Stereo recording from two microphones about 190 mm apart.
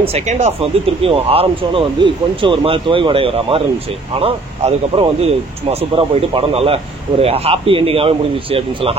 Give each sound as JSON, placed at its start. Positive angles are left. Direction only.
{"t": 0.0, "sound": "speech", "side_deg": -35}